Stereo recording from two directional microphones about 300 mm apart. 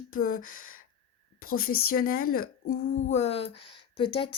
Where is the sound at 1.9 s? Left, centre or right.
Left.